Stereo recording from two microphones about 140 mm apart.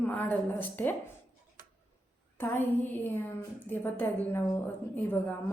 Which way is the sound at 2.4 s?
15° left (ahead or behind).